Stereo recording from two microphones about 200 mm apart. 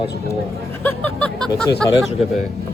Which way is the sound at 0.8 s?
10° left (ahead or behind).